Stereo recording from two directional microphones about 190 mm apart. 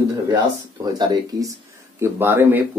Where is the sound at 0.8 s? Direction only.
20° right (ahead or behind).